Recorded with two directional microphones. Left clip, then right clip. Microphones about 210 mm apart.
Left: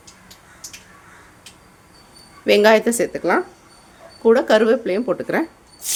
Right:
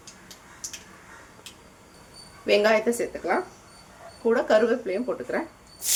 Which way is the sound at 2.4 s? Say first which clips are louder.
Left 7 dB; 45° left (ahead or behind).